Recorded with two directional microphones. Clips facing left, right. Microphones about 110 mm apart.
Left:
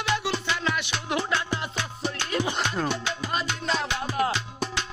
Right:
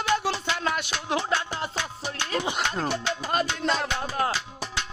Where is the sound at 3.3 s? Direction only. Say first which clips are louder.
Right 3 dB; 50° right (ahead or behind).